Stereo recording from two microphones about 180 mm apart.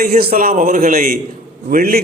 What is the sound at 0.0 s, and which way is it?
A man's voice, 55° right (ahead or behind).